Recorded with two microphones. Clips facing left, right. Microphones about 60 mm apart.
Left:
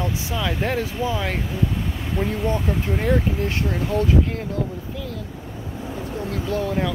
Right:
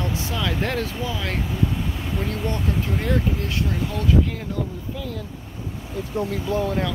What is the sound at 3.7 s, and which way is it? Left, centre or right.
Speech, left.